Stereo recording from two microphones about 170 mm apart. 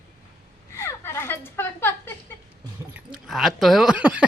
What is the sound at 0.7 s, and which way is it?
Speech, 15° left (ahead or behind).